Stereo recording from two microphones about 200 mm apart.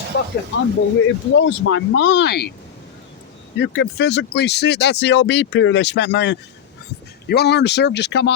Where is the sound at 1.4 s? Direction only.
70° left (ahead or behind); by 2.5 s 55° left (ahead or behind).